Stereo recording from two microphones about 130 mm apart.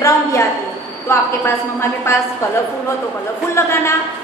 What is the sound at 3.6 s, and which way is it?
Speech, 20° left (ahead or behind).